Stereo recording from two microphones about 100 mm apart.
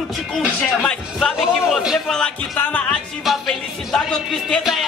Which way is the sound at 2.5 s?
15° left (ahead or behind).